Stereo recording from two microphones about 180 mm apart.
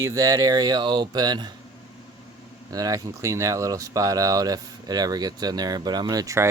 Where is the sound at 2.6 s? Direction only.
20° right (ahead or behind).